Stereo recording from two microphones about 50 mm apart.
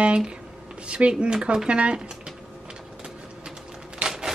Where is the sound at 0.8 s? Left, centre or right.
Right.